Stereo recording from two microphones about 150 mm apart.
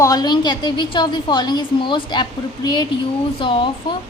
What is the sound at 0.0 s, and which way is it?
A woman's voice, 25° left (ahead or behind).